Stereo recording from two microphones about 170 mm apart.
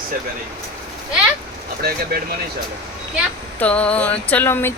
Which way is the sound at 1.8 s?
65° right (ahead or behind).